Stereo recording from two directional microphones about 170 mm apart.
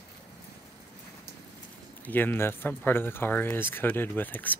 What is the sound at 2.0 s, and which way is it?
Speech, 10° left (ahead or behind).